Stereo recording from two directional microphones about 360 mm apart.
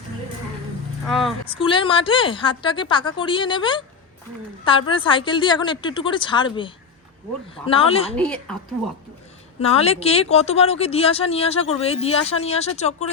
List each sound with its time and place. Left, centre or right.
1.0 s a sound: centre
1.5 s speech: centre
4.9 s speech: centre
8.1 s a woman's voice: centre
9.6 s speech: centre